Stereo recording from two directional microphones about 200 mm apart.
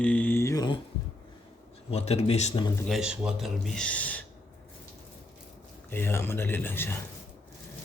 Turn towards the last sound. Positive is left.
turn(degrees=10)  # may be behind; listen again after turning